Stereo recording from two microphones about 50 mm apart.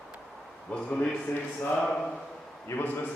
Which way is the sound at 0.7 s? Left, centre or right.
Left.